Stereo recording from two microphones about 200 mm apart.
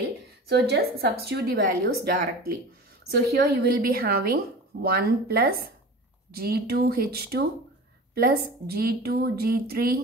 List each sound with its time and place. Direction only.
0.5 s a woman's voice: 55° right (ahead or behind)